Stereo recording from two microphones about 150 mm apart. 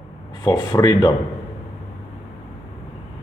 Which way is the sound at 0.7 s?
25° left (ahead or behind).